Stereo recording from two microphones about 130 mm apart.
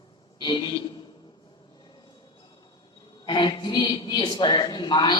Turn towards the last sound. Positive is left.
turn(degrees=35)  # may be behind; listen again after turning